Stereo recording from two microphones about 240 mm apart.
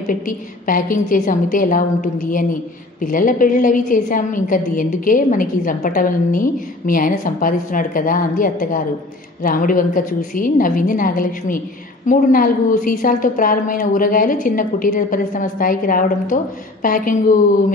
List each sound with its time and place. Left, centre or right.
0.0 s a woman's voice: left